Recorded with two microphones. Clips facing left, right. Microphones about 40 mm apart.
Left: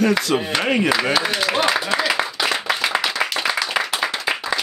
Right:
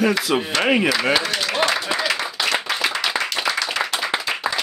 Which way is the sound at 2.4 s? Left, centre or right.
Centre.